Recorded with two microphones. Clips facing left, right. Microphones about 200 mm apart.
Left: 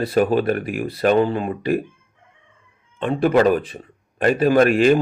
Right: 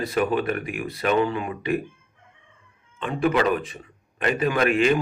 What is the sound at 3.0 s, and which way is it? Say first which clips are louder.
A man's voice: left 6 dB; 35° left (ahead or behind).